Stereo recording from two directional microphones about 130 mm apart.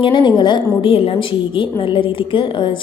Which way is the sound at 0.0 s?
40° left (ahead or behind).